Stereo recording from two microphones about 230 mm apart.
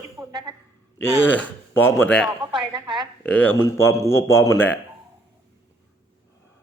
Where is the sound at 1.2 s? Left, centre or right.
Centre.